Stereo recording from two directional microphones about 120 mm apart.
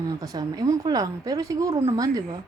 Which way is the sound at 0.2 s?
30° right (ahead or behind).